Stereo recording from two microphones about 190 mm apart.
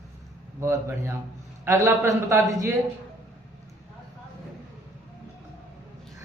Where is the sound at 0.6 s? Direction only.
15° right (ahead or behind).